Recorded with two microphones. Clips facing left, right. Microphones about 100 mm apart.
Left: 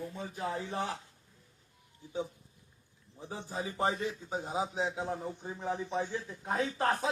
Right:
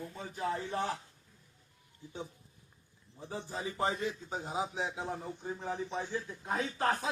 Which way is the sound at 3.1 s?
15° left (ahead or behind).